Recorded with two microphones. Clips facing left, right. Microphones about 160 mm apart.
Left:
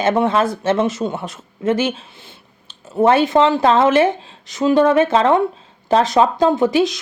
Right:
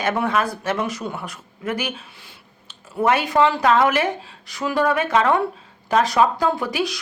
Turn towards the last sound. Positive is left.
turn(degrees=25)  # may be behind; listen again after turning